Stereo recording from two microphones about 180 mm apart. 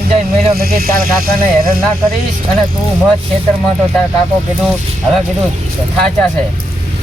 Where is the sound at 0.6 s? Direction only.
55° right (ahead or behind).